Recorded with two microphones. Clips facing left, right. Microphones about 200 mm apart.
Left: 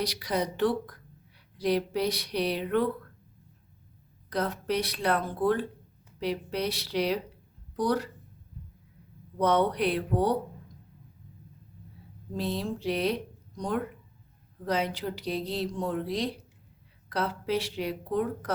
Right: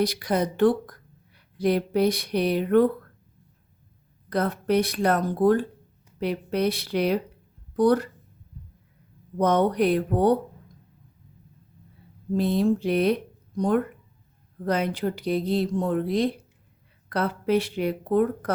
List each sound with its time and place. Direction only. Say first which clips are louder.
0.0 s speech: right 6 dB; 50° right (ahead or behind)
4.3 s speech: right 6 dB; 55° right (ahead or behind)
6.1 s a woman's voice: right 5 dB; 55° right (ahead or behind)
9.4 s speech: right 4 dB; 45° right (ahead or behind)
12.4 s a woman's voice: right 9 dB; 55° right (ahead or behind)